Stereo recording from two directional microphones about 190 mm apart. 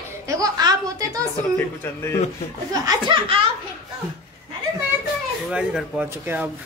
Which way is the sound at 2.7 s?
20° right (ahead or behind).